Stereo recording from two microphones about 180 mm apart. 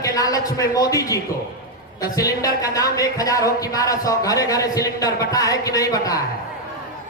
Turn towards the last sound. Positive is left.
turn(degrees=20)  # may be behind; listen again after turning